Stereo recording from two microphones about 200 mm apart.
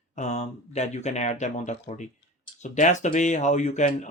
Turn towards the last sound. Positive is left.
turn(degrees=35)  # may be behind; listen again after turning